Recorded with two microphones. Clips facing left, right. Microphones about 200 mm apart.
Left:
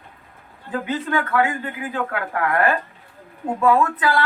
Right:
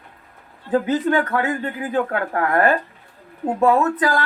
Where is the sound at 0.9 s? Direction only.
35° right (ahead or behind).